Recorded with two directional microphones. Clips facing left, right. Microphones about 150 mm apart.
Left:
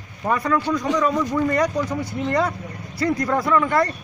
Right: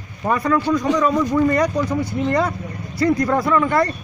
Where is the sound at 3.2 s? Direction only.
20° right (ahead or behind).